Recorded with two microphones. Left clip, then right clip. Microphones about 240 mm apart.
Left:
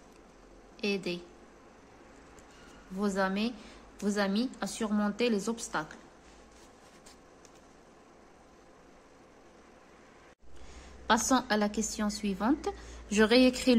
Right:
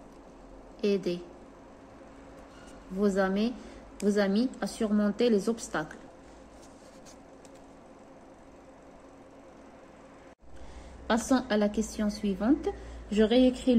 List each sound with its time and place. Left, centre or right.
0.7 s a woman's voice: centre
3.0 s a woman's voice: centre
11.1 s a woman's voice: centre